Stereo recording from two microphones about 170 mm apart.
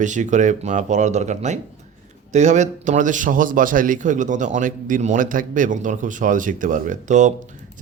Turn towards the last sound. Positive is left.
turn(degrees=-45)  # may be behind; listen again after turning